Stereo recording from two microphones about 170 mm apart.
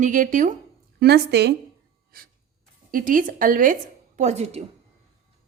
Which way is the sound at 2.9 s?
55° right (ahead or behind).